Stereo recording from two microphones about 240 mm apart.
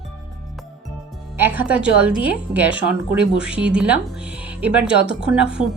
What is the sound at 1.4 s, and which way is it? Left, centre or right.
Speech, centre.